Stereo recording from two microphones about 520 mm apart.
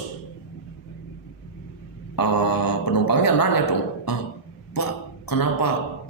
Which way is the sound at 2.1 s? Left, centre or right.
Left.